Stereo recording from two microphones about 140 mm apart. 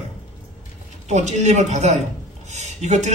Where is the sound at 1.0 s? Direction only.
55° right (ahead or behind).